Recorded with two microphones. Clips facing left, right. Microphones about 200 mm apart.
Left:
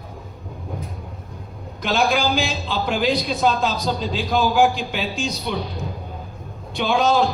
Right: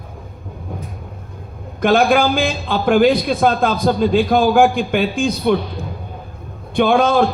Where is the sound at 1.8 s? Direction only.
55° right (ahead or behind).